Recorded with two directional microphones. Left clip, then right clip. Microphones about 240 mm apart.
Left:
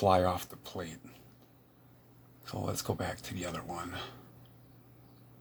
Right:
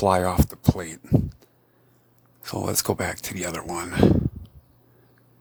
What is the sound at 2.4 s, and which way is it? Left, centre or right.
Speech, right.